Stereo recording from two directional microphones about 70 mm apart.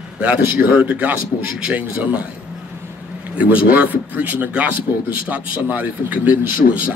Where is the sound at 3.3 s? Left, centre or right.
Right.